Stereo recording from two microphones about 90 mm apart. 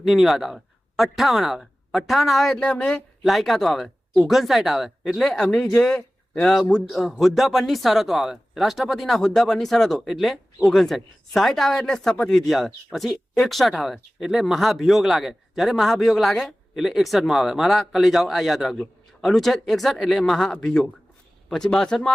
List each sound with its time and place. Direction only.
0.0 s speech: centre (ahead or behind)
2.6 s speech: 10° left (ahead or behind)